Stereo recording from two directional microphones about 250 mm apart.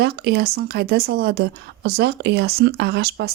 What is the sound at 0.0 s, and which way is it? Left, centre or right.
A woman's voice, right.